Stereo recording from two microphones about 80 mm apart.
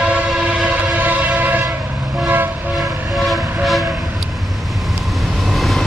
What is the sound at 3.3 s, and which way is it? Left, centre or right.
Train, centre.